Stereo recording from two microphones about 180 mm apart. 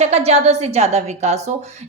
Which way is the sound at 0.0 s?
35° right (ahead or behind).